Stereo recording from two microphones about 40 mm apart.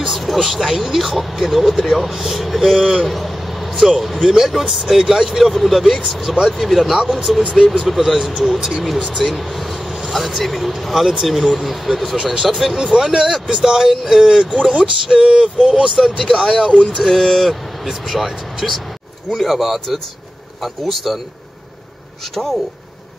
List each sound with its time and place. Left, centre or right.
0.1 s speech: centre
2.8 s speech: centre
12.7 s speech: centre
16.7 s a sound: centre
17.0 s speech: centre
22.3 s speech: centre